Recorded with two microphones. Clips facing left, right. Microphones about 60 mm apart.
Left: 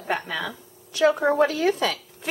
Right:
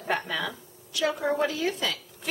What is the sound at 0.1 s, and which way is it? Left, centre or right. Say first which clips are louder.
Speech: left 1 dB; centre.